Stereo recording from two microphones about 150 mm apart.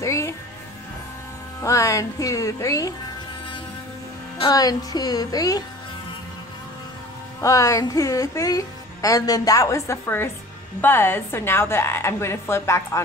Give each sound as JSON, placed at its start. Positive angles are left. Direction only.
{"t": 0.0, "sound": "music", "side_deg": 20}
{"t": 1.6, "sound": "speech", "side_deg": 20}
{"t": 4.4, "sound": "speech", "side_deg": 25}
{"t": 7.3, "sound": "a woman's voice", "side_deg": 20}